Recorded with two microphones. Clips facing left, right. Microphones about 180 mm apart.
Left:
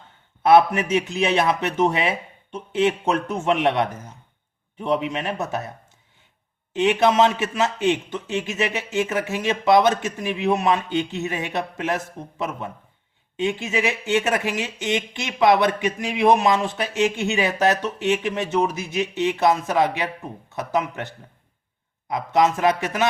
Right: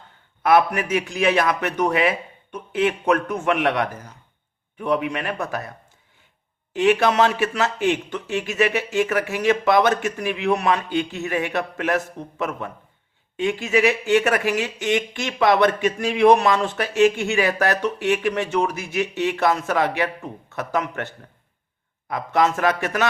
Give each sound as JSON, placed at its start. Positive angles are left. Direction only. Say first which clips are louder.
{"t": 0.4, "sound": "speech", "louder": "left 2 dB", "side_deg": 25}
{"t": 6.7, "sound": "a man's voice", "louder": "even", "side_deg": 20}